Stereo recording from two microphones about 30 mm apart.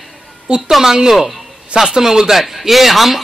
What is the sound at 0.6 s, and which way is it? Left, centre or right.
Speech, centre.